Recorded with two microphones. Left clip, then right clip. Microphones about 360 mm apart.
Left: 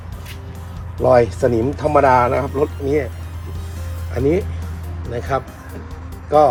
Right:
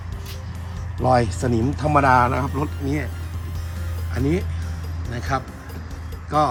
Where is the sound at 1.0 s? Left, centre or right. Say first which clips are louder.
Left 6 dB; centre.